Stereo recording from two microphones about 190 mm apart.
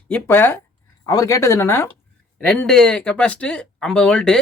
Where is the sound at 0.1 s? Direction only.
10° left (ahead or behind).